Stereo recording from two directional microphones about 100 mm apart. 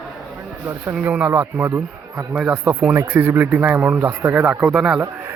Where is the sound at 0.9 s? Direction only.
10° right (ahead or behind).